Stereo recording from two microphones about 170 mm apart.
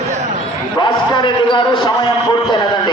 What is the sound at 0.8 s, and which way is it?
Basketball bounce, 30° left (ahead or behind).